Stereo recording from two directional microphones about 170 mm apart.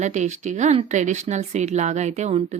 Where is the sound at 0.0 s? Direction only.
45° right (ahead or behind).